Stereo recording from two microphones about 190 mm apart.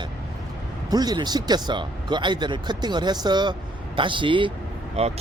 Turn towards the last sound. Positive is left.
turn(degrees=-30)  # may be behind; listen again after turning